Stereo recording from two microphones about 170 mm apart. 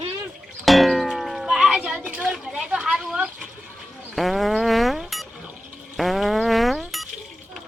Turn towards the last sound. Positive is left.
turn(degrees=0)  # may be behind; listen again after turning